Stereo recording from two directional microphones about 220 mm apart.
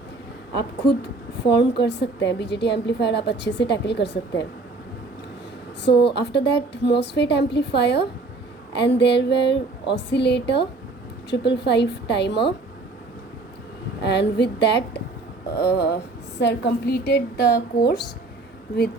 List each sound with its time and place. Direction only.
0.8 s a woman's voice: 45° left (ahead or behind)
5.8 s a woman's voice: 50° left (ahead or behind)
14.0 s a woman's voice: 50° left (ahead or behind)